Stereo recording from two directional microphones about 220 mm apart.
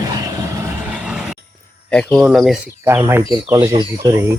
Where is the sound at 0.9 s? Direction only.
5° right (ahead or behind).